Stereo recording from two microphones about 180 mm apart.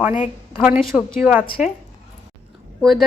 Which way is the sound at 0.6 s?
5° right (ahead or behind).